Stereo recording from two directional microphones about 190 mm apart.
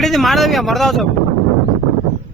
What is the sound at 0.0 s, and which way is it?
A man's voice, centre (ahead or behind).